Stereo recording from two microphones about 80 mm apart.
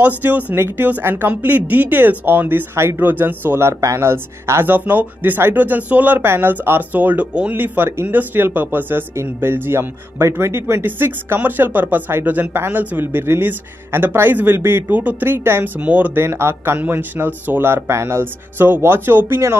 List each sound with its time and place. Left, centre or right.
0.0 s speech: right
15.8 s speech: centre
16.2 s speech: right